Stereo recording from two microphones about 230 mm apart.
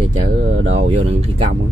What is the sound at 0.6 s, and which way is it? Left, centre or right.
Speech, right.